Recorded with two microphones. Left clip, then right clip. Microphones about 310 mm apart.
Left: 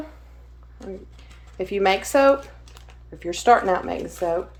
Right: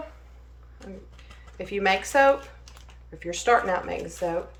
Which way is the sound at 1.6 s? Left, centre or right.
Centre.